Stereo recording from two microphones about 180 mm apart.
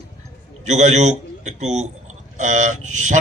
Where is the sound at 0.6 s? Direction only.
40° right (ahead or behind).